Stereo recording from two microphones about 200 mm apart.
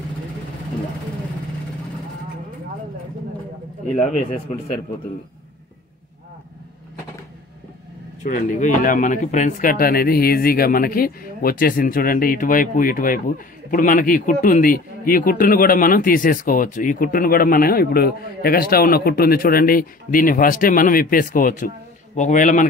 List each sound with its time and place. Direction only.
3.9 s a man's voice: 40° left (ahead or behind)
8.2 s speech: 40° left (ahead or behind)